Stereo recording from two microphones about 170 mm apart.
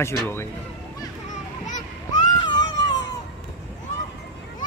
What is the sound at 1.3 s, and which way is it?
Children playing, 45° left (ahead or behind).